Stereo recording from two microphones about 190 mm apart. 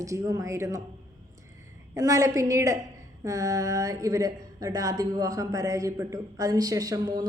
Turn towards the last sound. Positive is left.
turn(degrees=-20)  # may be behind; listen again after turning